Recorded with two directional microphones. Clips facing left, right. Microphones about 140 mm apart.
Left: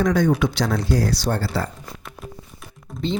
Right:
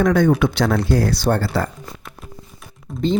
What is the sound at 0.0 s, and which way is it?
Speech, 60° right (ahead or behind).